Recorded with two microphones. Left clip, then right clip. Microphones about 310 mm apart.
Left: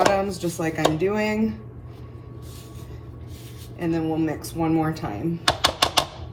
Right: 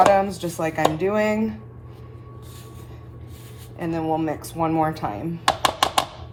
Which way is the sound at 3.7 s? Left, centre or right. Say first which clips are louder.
Right 1 dB; right.